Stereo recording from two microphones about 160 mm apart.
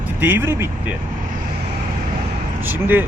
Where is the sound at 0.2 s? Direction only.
15° right (ahead or behind).